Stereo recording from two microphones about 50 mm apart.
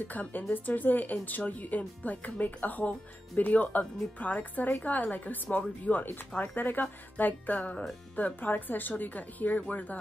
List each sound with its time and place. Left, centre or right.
0.1 s a woman's voice: left